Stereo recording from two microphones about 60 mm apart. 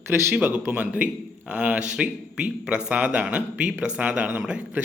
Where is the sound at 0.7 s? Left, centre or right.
Right.